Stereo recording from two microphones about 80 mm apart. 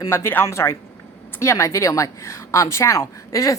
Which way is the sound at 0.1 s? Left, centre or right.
Left.